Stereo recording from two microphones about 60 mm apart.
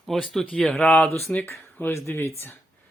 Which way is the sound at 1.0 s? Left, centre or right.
Left.